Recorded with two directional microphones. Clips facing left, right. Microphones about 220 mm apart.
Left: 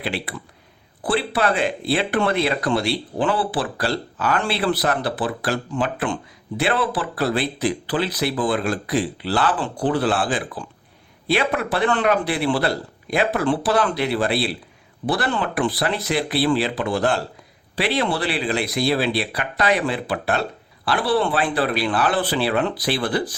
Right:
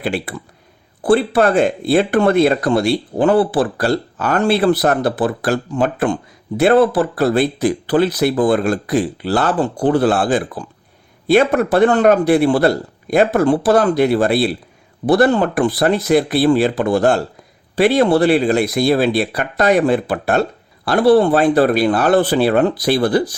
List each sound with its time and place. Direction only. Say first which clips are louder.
0.0 s speech: right 6 dB; 45° right (ahead or behind)